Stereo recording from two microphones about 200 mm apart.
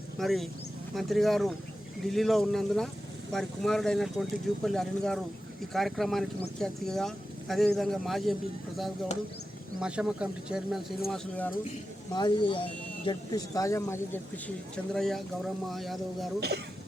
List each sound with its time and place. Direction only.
0.2 s speech: centre (ahead or behind)
9.8 s speech: 5° right (ahead or behind)
12.1 s speech: 20° left (ahead or behind); by 16.3 s centre (ahead or behind)